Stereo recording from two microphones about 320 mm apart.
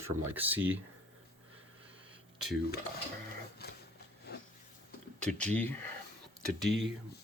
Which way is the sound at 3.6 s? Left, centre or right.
Left.